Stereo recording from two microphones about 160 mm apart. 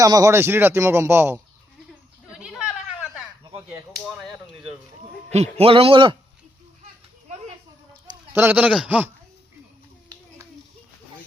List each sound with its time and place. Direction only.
0.0 s speech: 20° right (ahead or behind)
2.3 s a sound: 5° right (ahead or behind)
5.3 s a man's voice: 40° right (ahead or behind)
8.3 s speech: 15° right (ahead or behind)